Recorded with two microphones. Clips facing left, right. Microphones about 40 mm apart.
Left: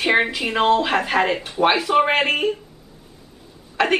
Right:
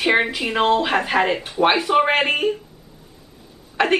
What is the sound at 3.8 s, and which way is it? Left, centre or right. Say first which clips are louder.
Speech: right 1 dB; centre.